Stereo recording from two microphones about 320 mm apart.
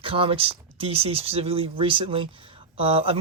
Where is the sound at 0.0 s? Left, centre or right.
Centre.